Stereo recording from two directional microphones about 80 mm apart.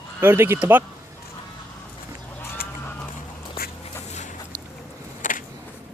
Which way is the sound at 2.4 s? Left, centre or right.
Left.